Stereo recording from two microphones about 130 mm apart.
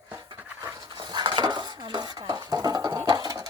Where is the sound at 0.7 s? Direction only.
35° right (ahead or behind).